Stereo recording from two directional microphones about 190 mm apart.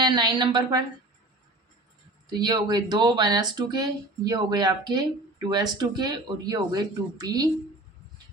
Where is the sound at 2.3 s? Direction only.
20° right (ahead or behind).